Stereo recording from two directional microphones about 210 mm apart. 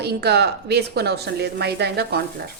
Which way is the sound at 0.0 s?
50° right (ahead or behind).